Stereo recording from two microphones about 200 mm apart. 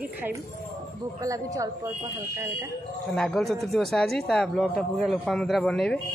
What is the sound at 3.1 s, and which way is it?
Speech, centre (ahead or behind).